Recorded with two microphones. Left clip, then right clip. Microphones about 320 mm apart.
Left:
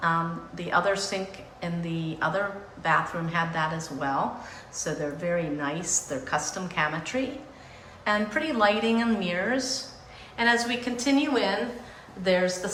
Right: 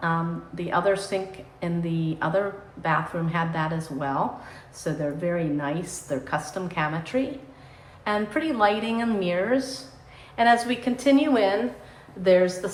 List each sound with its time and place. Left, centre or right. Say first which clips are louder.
0.0 s a woman's voice: left 1 dB; centre